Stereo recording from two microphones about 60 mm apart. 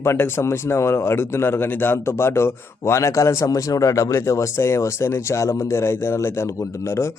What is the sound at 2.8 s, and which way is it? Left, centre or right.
Speech, left.